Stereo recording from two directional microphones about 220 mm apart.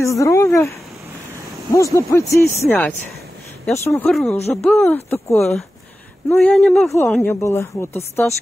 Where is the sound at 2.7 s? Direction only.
Centre (ahead or behind).